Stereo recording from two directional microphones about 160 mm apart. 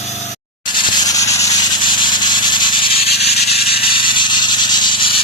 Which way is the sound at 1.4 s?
25° left (ahead or behind).